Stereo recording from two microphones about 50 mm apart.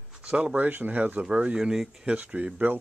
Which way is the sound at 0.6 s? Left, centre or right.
Right.